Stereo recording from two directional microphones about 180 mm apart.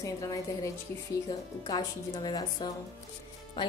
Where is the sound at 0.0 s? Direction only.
20° left (ahead or behind).